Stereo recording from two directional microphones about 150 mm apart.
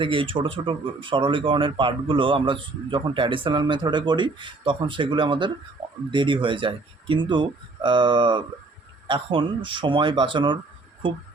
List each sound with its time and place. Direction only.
0.0 s speech: 35° right (ahead or behind)